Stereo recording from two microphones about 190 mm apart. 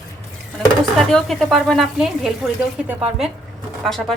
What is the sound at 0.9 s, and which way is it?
A woman's voice, centre (ahead or behind).